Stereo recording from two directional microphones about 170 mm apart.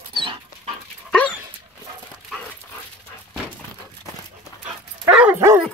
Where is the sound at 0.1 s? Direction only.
30° right (ahead or behind).